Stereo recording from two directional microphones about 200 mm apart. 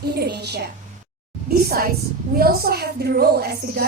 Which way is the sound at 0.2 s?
55° right (ahead or behind).